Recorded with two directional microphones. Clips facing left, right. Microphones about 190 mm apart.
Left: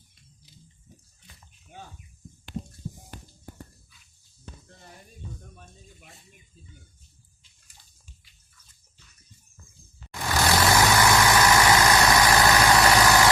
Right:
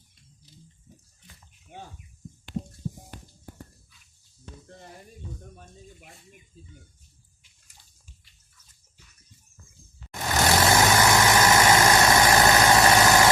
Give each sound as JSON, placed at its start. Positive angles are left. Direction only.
{"t": 10.1, "sound": "vehicle", "side_deg": -20}